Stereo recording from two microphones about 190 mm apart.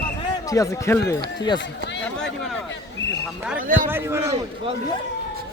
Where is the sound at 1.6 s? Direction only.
70° left (ahead or behind).